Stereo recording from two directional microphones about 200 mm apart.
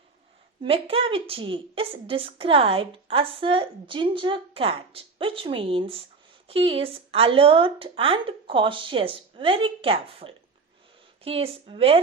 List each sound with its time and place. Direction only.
0.6 s a woman's voice: 30° right (ahead or behind)